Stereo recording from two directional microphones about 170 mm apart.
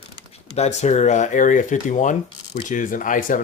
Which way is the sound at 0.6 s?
40° left (ahead or behind).